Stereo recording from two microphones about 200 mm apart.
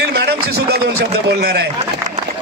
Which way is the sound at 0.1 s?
55° right (ahead or behind).